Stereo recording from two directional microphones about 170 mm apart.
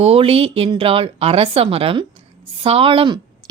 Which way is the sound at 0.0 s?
35° right (ahead or behind).